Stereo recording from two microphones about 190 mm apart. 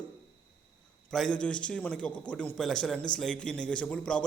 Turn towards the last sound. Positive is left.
turn(degrees=5)  # may be behind; listen again after turning